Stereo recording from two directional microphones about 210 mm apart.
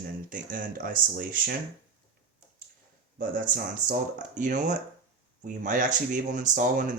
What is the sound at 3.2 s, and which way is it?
Speech, 40° right (ahead or behind).